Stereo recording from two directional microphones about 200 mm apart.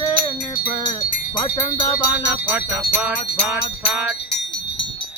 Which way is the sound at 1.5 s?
20° left (ahead or behind).